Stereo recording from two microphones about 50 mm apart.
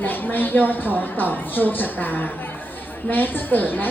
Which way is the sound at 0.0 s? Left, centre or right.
Left.